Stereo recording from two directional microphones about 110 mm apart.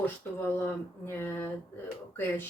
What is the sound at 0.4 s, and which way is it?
Speech, 20° left (ahead or behind).